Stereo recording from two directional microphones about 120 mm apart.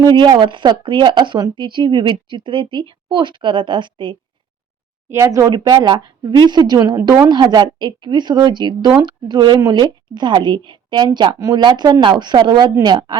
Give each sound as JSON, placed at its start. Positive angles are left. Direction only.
{"t": 0.2, "sound": "speech", "side_deg": -40}
{"t": 5.0, "sound": "speech", "side_deg": -25}